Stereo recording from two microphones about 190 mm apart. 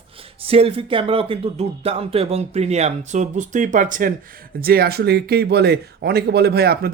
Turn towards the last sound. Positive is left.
turn(degrees=-55)  # may be behind; listen again after turning